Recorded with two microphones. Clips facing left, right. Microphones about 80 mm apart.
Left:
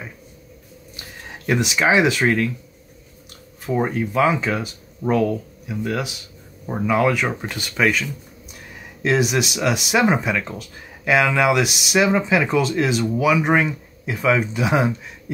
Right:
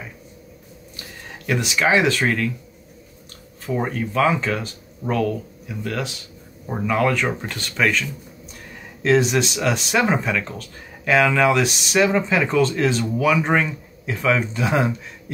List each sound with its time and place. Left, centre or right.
1.4 s speech: centre
3.6 s speech: centre